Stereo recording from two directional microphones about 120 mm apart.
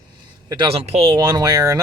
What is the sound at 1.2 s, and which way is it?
Speech, 30° right (ahead or behind).